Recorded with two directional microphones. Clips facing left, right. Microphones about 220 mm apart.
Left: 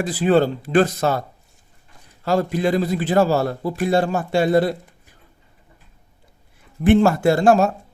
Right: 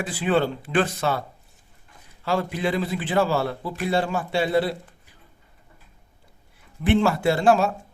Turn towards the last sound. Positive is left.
turn(degrees=45)  # may be behind; listen again after turning